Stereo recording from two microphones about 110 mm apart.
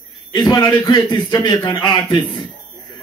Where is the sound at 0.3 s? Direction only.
30° left (ahead or behind).